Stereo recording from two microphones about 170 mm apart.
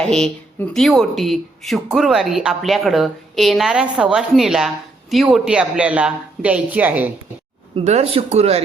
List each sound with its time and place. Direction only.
0.1 s speech: 5° left (ahead or behind)
7.9 s speech: 40° right (ahead or behind)